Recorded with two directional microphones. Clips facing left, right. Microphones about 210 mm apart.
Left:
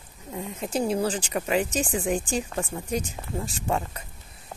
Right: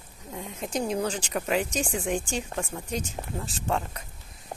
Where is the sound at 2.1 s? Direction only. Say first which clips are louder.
Left 2 dB; 35° left (ahead or behind).